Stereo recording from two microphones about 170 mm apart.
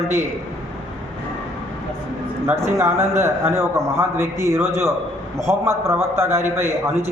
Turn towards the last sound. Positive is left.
turn(degrees=-15)  # may be behind; listen again after turning